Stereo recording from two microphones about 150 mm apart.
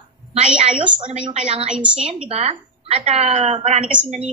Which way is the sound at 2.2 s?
40° right (ahead or behind).